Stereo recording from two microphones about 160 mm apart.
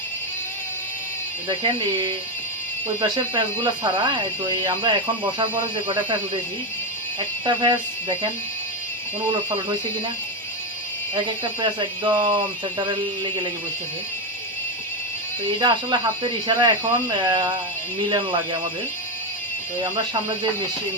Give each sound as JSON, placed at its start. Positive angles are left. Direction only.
{"t": 1.5, "sound": "speech", "side_deg": -30}
{"t": 7.4, "sound": "speech", "side_deg": -30}
{"t": 11.6, "sound": "speech", "side_deg": -30}
{"t": 15.5, "sound": "speech", "side_deg": -30}